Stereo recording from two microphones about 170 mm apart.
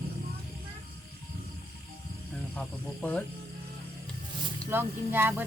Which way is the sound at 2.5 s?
5° left (ahead or behind).